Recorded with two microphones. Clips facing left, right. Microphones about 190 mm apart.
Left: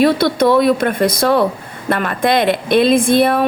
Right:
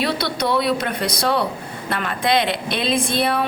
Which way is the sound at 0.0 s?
50° left (ahead or behind).